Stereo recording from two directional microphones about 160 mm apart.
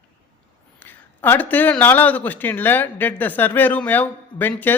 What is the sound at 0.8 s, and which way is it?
A woman's voice, 15° left (ahead or behind).